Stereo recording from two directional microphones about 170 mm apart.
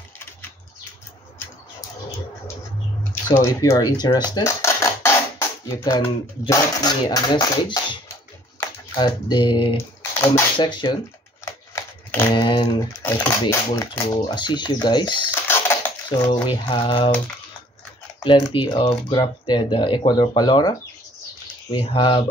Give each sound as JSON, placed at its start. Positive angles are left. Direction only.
{"t": 3.0, "sound": "speech", "side_deg": 15}
{"t": 11.7, "sound": "shuffling cards", "side_deg": 10}
{"t": 12.4, "sound": "speech", "side_deg": 30}
{"t": 13.0, "sound": "speech", "side_deg": 15}
{"t": 14.0, "sound": "speech", "side_deg": 30}
{"t": 16.3, "sound": "speech", "side_deg": 30}
{"t": 18.2, "sound": "speech", "side_deg": 30}
{"t": 21.7, "sound": "speech", "side_deg": 30}